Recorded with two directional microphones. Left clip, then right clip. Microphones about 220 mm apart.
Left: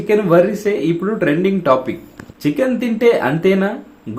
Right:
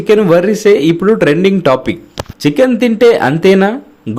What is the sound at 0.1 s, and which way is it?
Speech, 45° right (ahead or behind).